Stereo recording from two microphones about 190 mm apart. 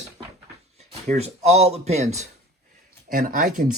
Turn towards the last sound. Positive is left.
turn(degrees=-50)  # may be behind; listen again after turning